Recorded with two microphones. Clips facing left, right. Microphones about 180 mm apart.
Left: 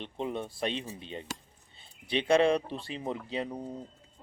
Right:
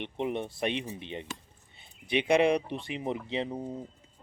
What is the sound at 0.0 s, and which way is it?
Speech, 20° right (ahead or behind).